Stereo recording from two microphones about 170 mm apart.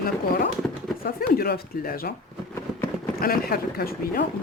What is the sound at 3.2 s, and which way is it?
Speech, 60° left (ahead or behind).